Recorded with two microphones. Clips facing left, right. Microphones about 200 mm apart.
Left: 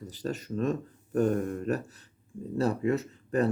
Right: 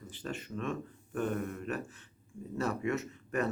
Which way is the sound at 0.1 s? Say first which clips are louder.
Left 6 dB; 40° left (ahead or behind).